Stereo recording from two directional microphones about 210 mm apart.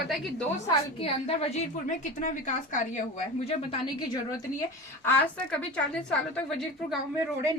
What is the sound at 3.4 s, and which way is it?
Speech, 25° left (ahead or behind).